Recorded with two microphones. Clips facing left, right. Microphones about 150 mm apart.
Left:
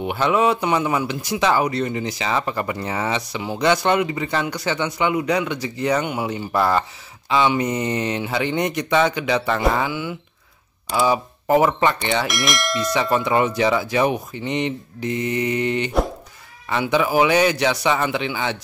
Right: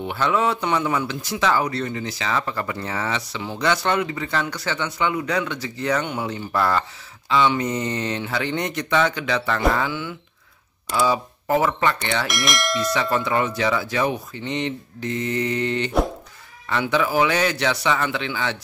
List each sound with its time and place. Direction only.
0.0 s speech: 15° left (ahead or behind)
12.3 s speech: centre (ahead or behind)
12.9 s speech: 15° left (ahead or behind)